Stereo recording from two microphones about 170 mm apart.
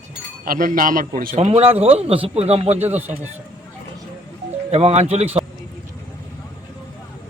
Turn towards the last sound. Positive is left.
turn(degrees=-40)  # may be behind; listen again after turning